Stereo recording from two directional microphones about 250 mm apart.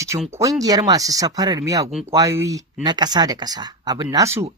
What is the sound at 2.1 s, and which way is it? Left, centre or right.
Speech, centre.